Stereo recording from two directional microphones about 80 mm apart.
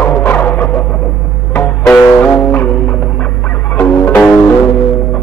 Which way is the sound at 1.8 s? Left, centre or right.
Left.